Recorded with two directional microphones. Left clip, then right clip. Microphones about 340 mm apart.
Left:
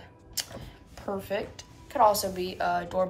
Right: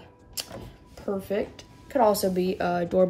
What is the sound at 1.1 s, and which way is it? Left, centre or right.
Speech, centre.